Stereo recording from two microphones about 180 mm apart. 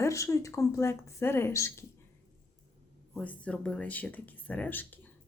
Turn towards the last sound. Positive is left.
turn(degrees=10)  # may be behind; listen again after turning